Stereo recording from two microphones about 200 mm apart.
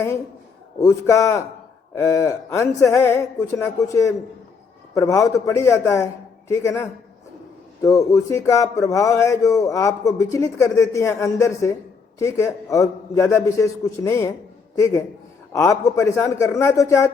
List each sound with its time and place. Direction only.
0.8 s speech: 15° left (ahead or behind)